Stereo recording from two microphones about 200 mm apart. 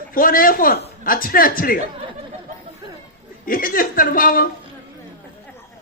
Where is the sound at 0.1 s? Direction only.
45° left (ahead or behind).